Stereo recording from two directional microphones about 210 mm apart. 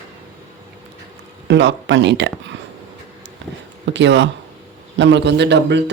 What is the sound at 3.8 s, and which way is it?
A man's voice, 60° right (ahead or behind).